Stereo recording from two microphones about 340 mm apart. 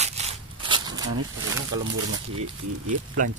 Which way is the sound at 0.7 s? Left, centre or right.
Centre.